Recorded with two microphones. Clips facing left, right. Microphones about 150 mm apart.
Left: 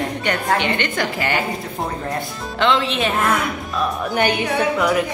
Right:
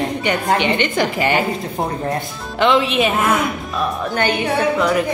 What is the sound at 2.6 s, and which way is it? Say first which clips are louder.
Speech: right 3 dB; 15° right (ahead or behind).